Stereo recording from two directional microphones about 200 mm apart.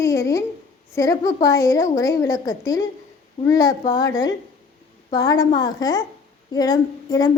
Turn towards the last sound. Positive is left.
turn(degrees=20)  # may be behind; listen again after turning